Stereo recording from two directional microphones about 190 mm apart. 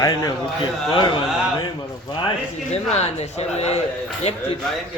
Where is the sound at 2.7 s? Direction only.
35° left (ahead or behind).